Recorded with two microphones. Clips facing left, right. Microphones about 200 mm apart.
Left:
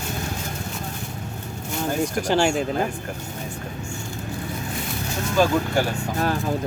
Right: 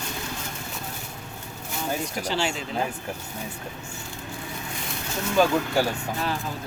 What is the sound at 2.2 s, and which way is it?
Speech, 50° left (ahead or behind).